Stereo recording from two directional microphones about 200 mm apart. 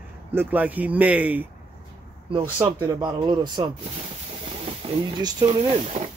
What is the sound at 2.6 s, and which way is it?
Speech, 20° right (ahead or behind).